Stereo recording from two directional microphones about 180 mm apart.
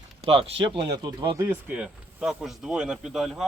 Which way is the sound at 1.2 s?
10° right (ahead or behind).